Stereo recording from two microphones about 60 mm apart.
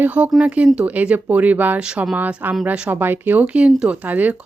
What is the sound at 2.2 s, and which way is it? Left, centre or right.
Speech, right.